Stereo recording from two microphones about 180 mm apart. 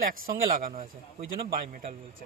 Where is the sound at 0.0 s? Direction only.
50° right (ahead or behind).